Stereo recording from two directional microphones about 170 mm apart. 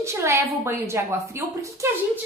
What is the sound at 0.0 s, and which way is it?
A woman's voice, 15° right (ahead or behind).